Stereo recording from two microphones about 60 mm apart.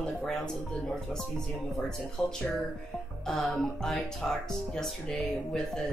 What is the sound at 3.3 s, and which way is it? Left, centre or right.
Speech, centre.